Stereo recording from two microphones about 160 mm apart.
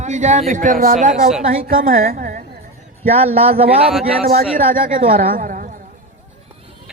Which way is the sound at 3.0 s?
40° right (ahead or behind).